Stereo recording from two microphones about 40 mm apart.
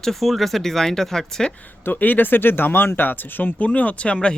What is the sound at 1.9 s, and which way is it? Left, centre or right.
Speech, left.